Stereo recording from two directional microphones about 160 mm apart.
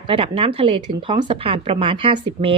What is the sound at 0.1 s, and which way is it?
Speech, 35° right (ahead or behind).